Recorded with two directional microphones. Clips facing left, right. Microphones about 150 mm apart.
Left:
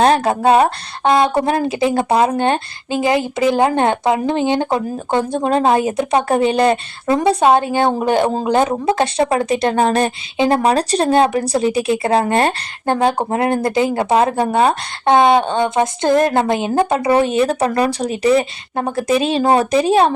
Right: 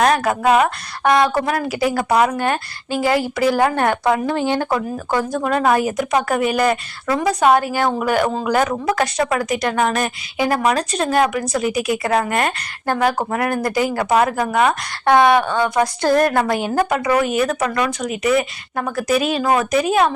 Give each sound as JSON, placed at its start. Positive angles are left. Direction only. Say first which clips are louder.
{"t": 0.0, "sound": "speech", "louder": "left 3 dB", "side_deg": 30}